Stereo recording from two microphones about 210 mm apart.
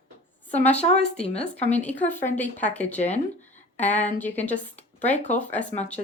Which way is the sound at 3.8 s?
35° left (ahead or behind).